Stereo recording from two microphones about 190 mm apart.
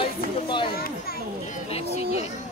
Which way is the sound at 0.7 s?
50° left (ahead or behind).